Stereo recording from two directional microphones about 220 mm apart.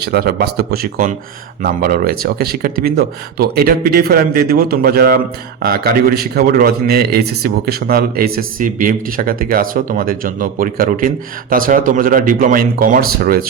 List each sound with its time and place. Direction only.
0.0 s a man's voice: 45° right (ahead or behind)